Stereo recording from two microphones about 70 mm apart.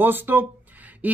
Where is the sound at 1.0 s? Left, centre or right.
Right.